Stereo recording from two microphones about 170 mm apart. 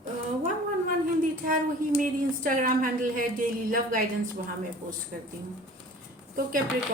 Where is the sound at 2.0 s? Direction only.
50° right (ahead or behind).